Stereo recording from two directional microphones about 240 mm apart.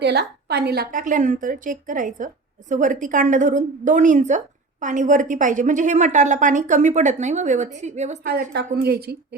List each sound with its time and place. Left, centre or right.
0.0 s a woman's voice: right
8.5 s a woman's voice: right